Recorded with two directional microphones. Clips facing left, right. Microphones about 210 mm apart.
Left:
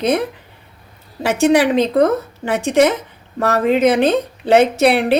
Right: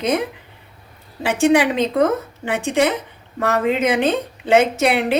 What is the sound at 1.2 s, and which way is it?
A woman's voice, 40° left (ahead or behind).